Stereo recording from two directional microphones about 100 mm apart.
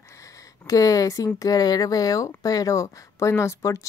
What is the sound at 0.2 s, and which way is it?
Speech, 35° left (ahead or behind).